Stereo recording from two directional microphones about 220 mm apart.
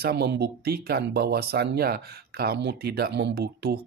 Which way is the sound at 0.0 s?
50° right (ahead or behind).